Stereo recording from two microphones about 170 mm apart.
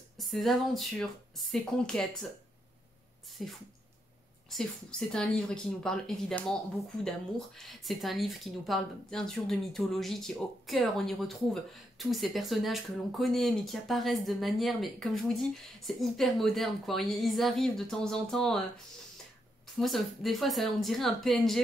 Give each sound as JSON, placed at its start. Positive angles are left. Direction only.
{"t": 0.2, "sound": "speech", "side_deg": 0}
{"t": 3.4, "sound": "speech", "side_deg": 0}
{"t": 19.8, "sound": "speech", "side_deg": 0}